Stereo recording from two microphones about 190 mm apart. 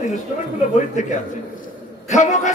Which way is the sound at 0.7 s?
40° left (ahead or behind).